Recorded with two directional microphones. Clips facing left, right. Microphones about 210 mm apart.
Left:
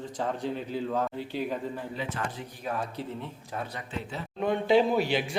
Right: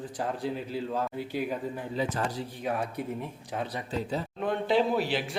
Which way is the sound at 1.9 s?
35° right (ahead or behind).